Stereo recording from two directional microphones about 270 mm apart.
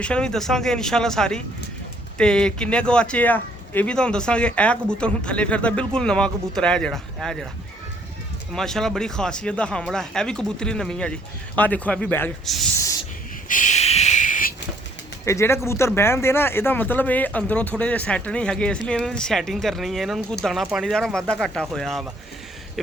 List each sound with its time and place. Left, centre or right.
0.0 s speech: centre
8.5 s speech: centre
13.5 s a sound: left
15.2 s speech: centre